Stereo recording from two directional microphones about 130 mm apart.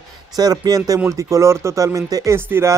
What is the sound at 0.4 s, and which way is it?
Speech, 30° right (ahead or behind).